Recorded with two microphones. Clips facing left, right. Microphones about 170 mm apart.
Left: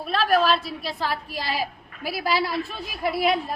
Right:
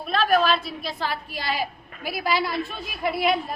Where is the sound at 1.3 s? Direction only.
35° left (ahead or behind).